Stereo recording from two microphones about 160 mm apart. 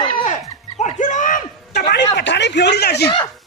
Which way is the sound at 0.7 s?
50° left (ahead or behind).